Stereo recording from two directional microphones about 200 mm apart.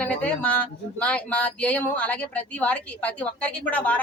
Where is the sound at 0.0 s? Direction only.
5° left (ahead or behind).